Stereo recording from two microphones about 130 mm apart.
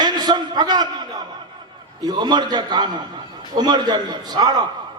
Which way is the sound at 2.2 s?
35° right (ahead or behind).